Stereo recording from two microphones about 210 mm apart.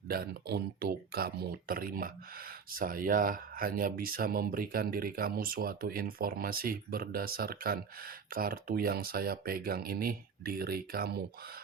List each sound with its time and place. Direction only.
0.1 s speech: 50° right (ahead or behind)